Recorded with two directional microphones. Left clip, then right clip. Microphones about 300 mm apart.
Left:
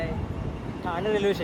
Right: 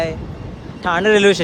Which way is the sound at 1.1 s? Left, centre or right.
Right.